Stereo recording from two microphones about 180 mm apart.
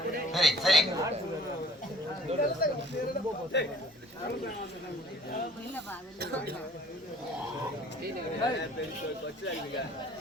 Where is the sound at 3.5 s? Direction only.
75° left (ahead or behind).